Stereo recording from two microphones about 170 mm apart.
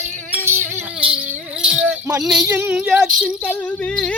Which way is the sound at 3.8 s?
5° left (ahead or behind).